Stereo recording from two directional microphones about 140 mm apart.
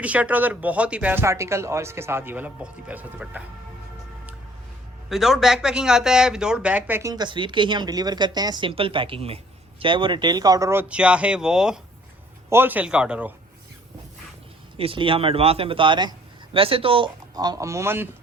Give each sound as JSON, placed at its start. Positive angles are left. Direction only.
{"t": 0.0, "sound": "speech", "side_deg": -10}
{"t": 5.0, "sound": "speech", "side_deg": 0}
{"t": 7.1, "sound": "speech", "side_deg": -30}
{"t": 14.8, "sound": "speech", "side_deg": -40}
{"t": 17.3, "sound": "speech", "side_deg": -25}